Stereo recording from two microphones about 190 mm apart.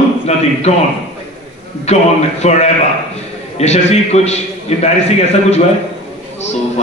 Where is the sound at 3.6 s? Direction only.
35° left (ahead or behind).